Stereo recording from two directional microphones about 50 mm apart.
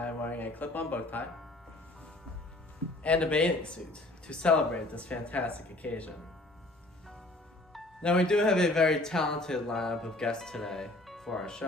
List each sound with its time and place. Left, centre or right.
0.0 s speech: left
3.0 s speech: left
8.0 s speech: centre
11.0 s music: centre